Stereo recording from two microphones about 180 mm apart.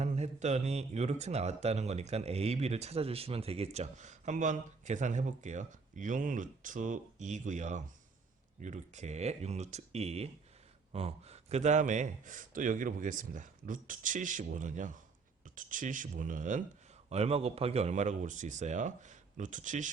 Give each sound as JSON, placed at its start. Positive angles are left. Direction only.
{"t": 0.0, "sound": "speech", "side_deg": -40}
{"t": 17.1, "sound": "speech", "side_deg": -35}